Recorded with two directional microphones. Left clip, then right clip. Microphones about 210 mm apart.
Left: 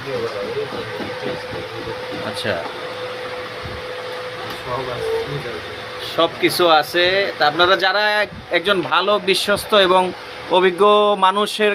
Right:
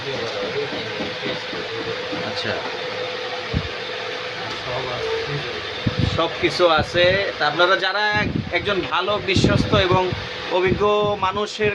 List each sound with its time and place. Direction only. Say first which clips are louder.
6.1 s speech: left 4 dB; 10° left (ahead or behind)